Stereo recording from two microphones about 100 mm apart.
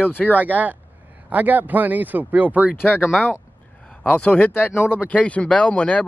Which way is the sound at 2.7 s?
15° left (ahead or behind).